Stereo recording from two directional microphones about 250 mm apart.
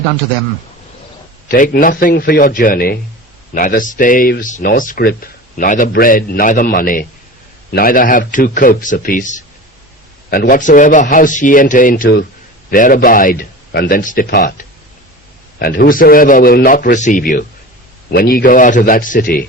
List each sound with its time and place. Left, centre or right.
1.5 s speech: left